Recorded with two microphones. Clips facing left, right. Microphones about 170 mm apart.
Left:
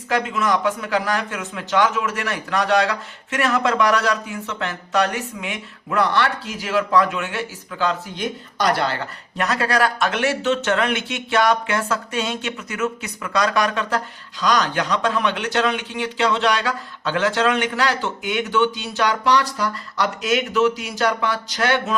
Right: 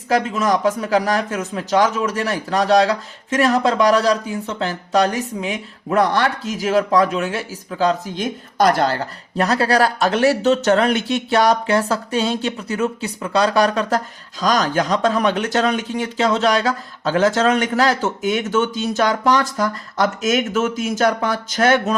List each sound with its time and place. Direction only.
0.1 s a man's voice: 40° right (ahead or behind)